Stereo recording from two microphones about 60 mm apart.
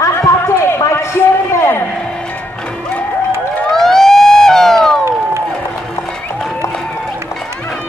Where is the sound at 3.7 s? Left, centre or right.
Centre.